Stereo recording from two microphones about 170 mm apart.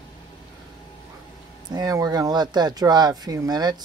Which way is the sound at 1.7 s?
20° right (ahead or behind).